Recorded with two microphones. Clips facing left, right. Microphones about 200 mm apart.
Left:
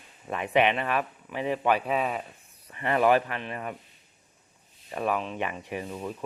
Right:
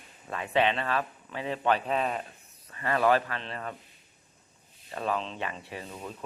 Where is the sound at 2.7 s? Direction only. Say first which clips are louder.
Left 2 dB; 20° left (ahead or behind).